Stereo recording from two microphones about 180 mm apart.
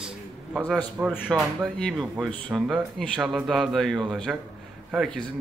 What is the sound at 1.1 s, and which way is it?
A man's voice, 5° left (ahead or behind).